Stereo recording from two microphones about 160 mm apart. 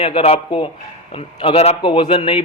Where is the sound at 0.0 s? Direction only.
35° left (ahead or behind).